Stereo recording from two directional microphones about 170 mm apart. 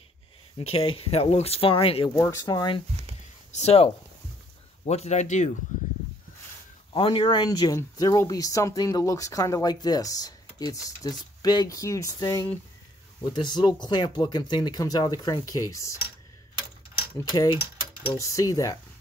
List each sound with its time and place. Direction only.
0.6 s speech: 35° left (ahead or behind)
2.1 s speech: 15° left (ahead or behind)
3.5 s speech: 35° left (ahead or behind)
6.9 s speech: 30° left (ahead or behind)
17.2 s speech: 25° left (ahead or behind)